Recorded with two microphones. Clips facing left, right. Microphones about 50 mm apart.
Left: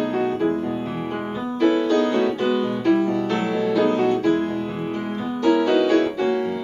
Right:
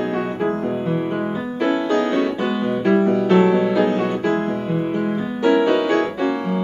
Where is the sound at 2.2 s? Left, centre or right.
Centre.